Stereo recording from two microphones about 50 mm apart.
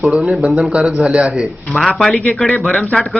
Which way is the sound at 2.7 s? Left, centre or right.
Centre.